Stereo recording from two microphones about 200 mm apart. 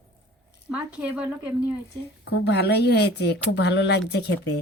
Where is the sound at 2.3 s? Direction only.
60° left (ahead or behind).